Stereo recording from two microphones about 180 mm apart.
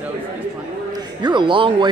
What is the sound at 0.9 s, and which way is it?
A man's voice, 25° right (ahead or behind).